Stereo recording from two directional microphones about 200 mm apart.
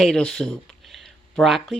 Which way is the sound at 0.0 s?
5° left (ahead or behind).